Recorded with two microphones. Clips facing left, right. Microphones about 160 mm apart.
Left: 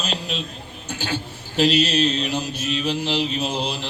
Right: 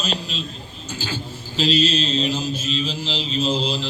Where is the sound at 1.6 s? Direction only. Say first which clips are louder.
Left 2 dB; 65° left (ahead or behind).